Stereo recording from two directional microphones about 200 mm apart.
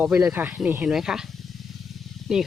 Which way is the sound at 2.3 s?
Centre (ahead or behind).